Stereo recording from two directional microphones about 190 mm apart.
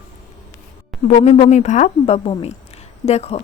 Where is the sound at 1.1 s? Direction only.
35° left (ahead or behind).